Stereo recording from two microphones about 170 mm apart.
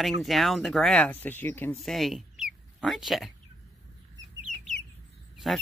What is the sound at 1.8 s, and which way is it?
Speech, centre (ahead or behind).